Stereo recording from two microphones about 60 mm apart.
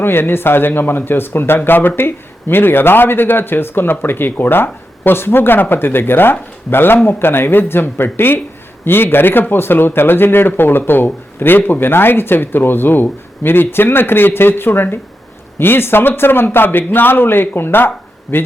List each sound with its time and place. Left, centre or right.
0.0 s speech: left